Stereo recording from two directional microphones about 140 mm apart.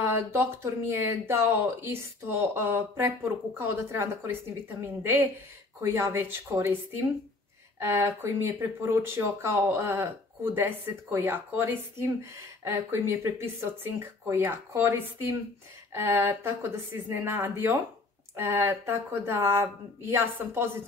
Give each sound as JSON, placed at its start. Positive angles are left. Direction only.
{"t": 0.1, "sound": "speech", "side_deg": -15}
{"t": 7.8, "sound": "speech", "side_deg": -20}